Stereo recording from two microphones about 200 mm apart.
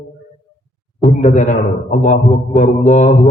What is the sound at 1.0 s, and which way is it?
Mantra, 40° left (ahead or behind).